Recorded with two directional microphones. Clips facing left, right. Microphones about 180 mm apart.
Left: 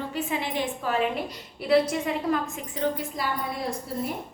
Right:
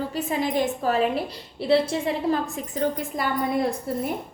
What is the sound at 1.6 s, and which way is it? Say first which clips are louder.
A woman's voice: right 1 dB; 30° right (ahead or behind).